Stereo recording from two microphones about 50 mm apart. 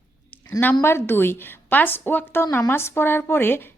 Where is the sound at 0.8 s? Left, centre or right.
Left.